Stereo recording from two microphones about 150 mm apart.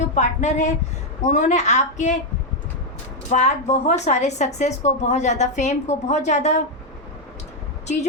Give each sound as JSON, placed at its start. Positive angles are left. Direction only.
{"t": 0.1, "sound": "a woman's voice", "side_deg": 50}
{"t": 3.2, "sound": "a woman's voice", "side_deg": 50}